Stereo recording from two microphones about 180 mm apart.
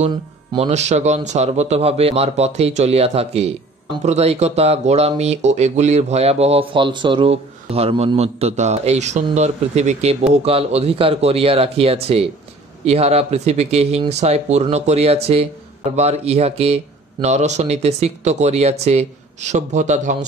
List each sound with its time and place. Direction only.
0.5 s a man's voice: 35° right (ahead or behind)